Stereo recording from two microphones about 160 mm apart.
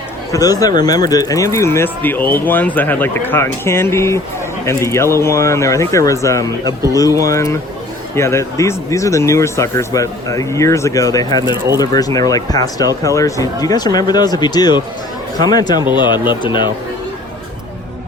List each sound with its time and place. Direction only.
0.3 s speech: 20° left (ahead or behind)